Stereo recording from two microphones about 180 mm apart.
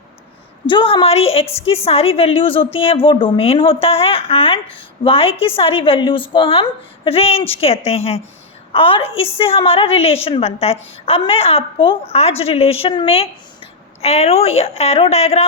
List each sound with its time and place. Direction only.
0.7 s a woman's voice: 25° left (ahead or behind)